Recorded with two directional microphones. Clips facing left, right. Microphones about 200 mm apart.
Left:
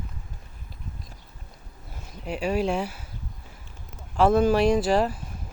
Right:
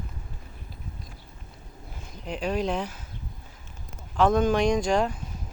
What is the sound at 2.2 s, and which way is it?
Speech, 5° left (ahead or behind).